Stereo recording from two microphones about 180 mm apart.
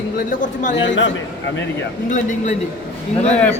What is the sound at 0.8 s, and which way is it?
Speech, 90° left.